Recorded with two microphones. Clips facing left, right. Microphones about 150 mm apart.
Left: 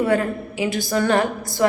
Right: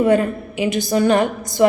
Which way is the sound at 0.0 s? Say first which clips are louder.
Right 4 dB; 20° right (ahead or behind).